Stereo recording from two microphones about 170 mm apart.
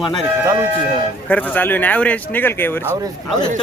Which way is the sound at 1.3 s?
10° left (ahead or behind).